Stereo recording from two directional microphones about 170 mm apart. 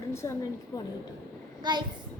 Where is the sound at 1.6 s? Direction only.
25° right (ahead or behind).